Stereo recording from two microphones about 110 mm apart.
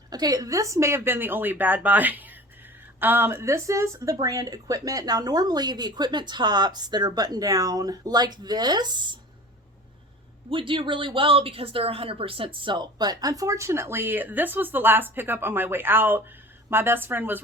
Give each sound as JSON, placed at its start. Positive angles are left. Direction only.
{"t": 0.1, "sound": "speech", "side_deg": -35}
{"t": 10.5, "sound": "speech", "side_deg": -50}